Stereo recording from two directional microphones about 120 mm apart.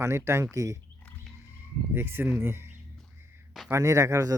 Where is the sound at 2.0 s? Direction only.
20° right (ahead or behind).